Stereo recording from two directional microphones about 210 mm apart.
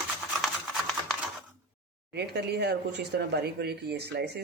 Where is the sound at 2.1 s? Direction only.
50° right (ahead or behind).